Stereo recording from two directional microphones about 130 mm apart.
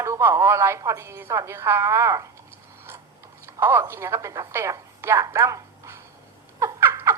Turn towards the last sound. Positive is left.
turn(degrees=-20)  # may be behind; listen again after turning